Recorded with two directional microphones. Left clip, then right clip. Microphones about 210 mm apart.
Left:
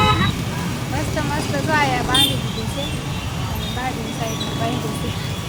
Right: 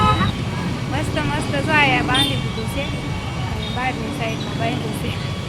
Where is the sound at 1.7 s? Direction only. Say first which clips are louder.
Right 2 dB; 5° left (ahead or behind).